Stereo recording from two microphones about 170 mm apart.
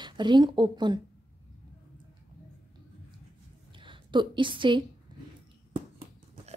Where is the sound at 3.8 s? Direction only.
30° right (ahead or behind).